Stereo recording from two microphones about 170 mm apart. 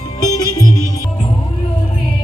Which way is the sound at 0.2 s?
25° left (ahead or behind).